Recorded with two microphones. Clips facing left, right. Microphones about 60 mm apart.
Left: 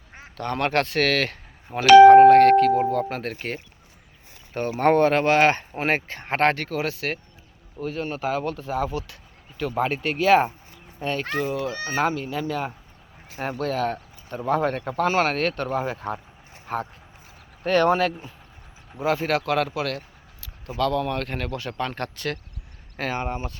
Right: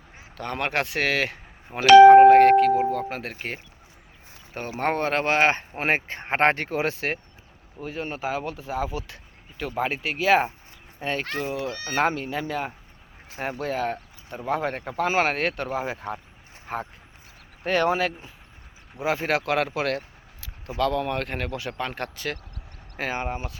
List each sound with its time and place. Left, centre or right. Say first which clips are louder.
0.3 s speech: left 3 dB; centre
11.0 s speech: left 2 dB; right
13.3 s speech: left 1 dB; centre
13.6 s speech: left 3 dB; centre
18.9 s speech: left 2 dB; centre